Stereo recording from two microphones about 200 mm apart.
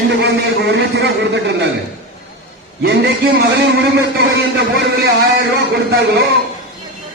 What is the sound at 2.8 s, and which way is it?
Speech, 55° right (ahead or behind).